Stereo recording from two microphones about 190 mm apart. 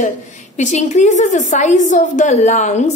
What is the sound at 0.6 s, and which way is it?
A woman's voice, 40° left (ahead or behind).